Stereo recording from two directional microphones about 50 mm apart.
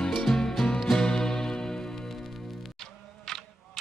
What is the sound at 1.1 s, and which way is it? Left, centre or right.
Music, centre.